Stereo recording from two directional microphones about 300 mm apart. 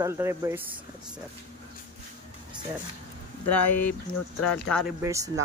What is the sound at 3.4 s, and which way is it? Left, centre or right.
Speech, left.